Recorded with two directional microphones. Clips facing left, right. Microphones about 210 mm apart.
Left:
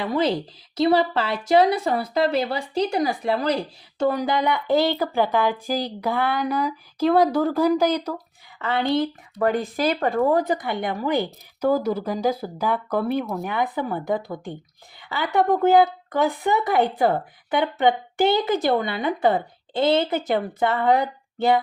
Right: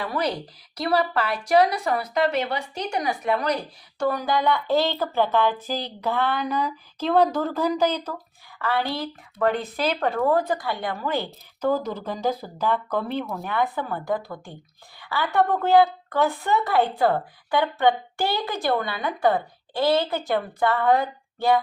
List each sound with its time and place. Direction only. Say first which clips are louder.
0.0 s speech: left 4 dB; 25° left (ahead or behind)